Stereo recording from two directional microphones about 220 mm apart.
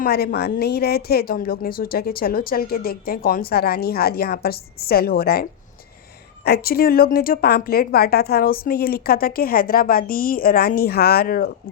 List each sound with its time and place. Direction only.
0.0 s speech: 45° left (ahead or behind)